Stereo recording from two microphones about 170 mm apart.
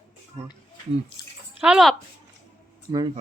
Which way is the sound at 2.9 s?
20° right (ahead or behind).